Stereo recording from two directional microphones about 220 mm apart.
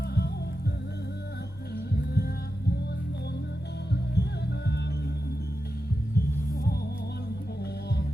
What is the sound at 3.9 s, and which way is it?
Music, 50° left (ahead or behind).